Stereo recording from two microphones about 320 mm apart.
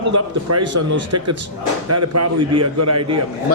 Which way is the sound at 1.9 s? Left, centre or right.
Right.